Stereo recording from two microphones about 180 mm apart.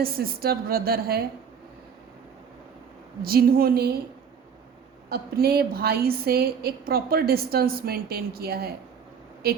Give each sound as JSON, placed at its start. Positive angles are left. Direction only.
{"t": 0.0, "sound": "a woman's voice", "side_deg": -55}
{"t": 3.2, "sound": "a woman's voice", "side_deg": -55}
{"t": 5.0, "sound": "a woman's voice", "side_deg": -60}